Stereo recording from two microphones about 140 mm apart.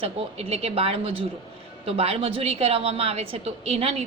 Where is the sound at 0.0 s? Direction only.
45° right (ahead or behind).